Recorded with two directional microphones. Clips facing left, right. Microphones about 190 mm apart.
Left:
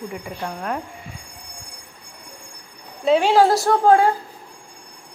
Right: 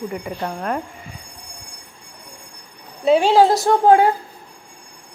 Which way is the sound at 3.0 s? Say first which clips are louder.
Right 2 dB; 10° right (ahead or behind).